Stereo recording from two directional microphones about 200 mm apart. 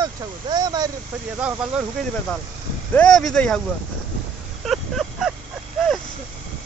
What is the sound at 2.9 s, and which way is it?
Speech, 5° left (ahead or behind).